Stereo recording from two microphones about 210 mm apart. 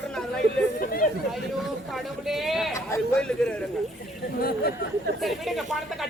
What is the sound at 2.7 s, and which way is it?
Speech, 15° left (ahead or behind).